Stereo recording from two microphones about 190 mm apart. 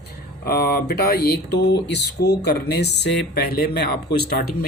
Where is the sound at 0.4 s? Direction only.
55° left (ahead or behind).